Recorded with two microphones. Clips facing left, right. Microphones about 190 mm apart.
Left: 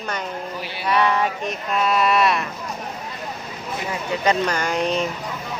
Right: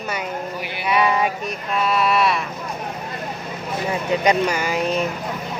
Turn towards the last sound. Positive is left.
turn(degrees=-5)  # may be behind; listen again after turning